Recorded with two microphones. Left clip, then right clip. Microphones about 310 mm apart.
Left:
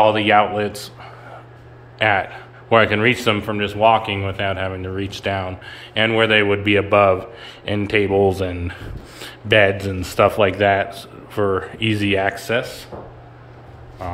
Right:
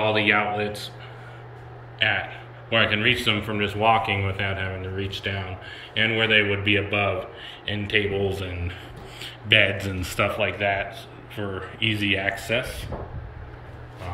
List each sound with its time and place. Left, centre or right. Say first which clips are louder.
0.4 s a man's voice: left 7 dB; centre
2.0 s a man's voice: left 6 dB; centre
10.4 s a man's voice: left 8 dB; centre